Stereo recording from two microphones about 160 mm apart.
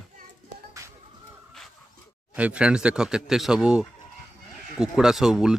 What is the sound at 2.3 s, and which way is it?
Speech, 5° right (ahead or behind).